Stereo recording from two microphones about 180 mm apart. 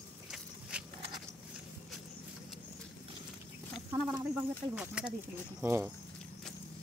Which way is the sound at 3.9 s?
15° right (ahead or behind).